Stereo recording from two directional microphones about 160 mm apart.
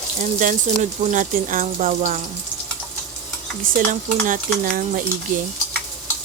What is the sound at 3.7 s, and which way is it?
Speech, 55° right (ahead or behind).